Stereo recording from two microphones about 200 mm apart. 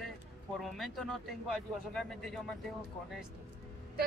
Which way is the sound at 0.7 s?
Centre (ahead or behind).